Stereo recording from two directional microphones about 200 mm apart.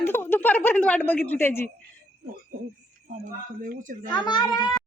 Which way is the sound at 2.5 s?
45° right (ahead or behind).